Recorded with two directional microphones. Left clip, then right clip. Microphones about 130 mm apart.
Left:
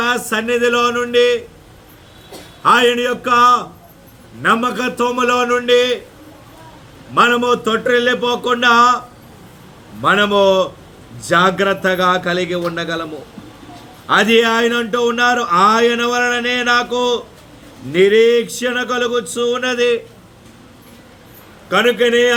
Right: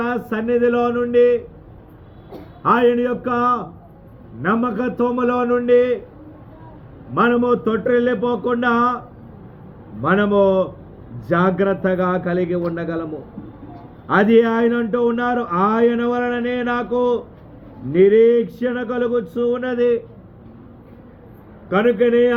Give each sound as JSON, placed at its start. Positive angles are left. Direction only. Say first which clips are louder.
{"t": 0.0, "sound": "speech", "louder": "left 5 dB", "side_deg": 15}
{"t": 2.6, "sound": "a man's voice", "louder": "left 3 dB", "side_deg": 20}
{"t": 7.1, "sound": "a man's voice", "louder": "left 4 dB", "side_deg": 20}
{"t": 10.0, "sound": "speech", "louder": "left 4 dB", "side_deg": 20}
{"t": 14.1, "sound": "speech", "louder": "left 2 dB", "side_deg": 20}
{"t": 21.7, "sound": "a man's voice", "louder": "left 3 dB", "side_deg": 15}